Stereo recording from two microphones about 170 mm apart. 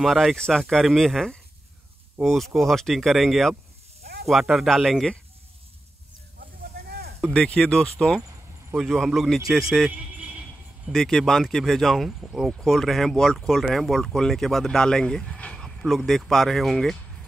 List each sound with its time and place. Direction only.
0.0 s speech: centre (ahead or behind)
6.4 s snake: 65° right (ahead or behind)
7.3 s speech: 5° left (ahead or behind)